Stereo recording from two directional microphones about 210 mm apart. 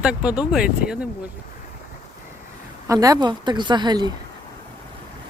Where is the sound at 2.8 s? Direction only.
15° right (ahead or behind).